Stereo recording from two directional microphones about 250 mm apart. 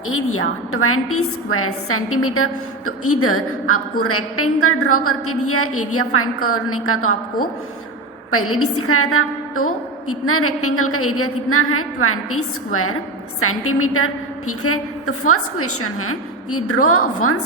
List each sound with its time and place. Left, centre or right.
0.1 s a woman's voice: left
8.3 s a woman's voice: left